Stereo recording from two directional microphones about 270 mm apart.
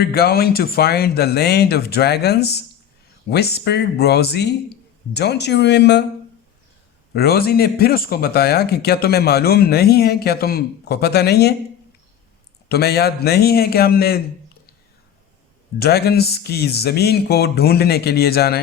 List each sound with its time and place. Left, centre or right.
0.0 s speech: left
7.1 s speech: left
12.6 s speech: left
15.8 s speech: left